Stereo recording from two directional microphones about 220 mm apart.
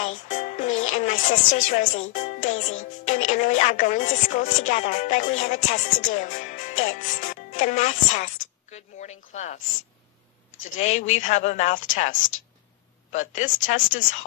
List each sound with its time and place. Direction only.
0.0 s music: 30° left (ahead or behind)
3.1 s speech: 35° left (ahead or behind)
10.8 s speech: 30° left (ahead or behind)